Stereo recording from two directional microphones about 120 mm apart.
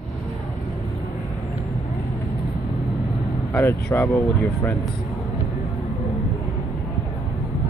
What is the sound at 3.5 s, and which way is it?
Speech, 15° left (ahead or behind).